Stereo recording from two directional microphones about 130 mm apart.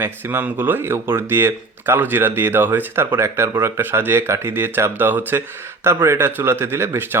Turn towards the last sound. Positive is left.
turn(degrees=-20)  # may be behind; listen again after turning